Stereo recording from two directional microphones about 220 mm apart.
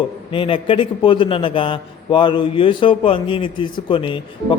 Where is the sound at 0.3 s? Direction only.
25° left (ahead or behind).